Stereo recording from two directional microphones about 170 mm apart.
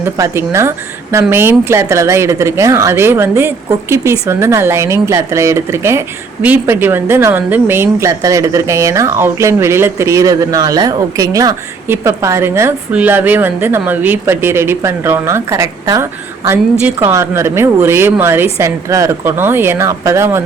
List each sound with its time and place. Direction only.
0.0 s speech: 15° right (ahead or behind)